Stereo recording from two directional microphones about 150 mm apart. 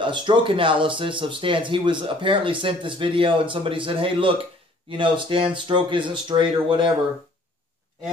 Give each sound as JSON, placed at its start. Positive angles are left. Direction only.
{"t": 0.0, "sound": "speech", "side_deg": -35}